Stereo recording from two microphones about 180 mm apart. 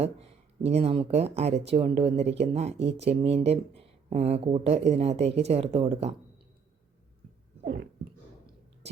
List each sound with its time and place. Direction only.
0.0 s speech: 35° right (ahead or behind)